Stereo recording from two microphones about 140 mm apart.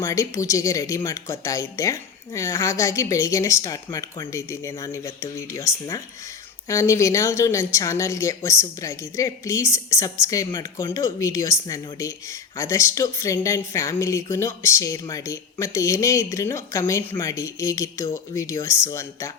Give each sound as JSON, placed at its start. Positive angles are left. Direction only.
{"t": 0.0, "sound": "speech", "side_deg": 20}